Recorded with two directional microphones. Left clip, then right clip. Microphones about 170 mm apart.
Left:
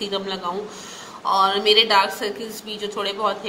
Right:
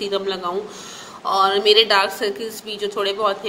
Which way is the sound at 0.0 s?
25° right (ahead or behind).